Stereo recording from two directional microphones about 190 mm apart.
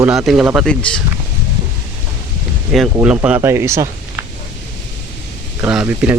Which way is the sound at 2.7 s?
5° right (ahead or behind).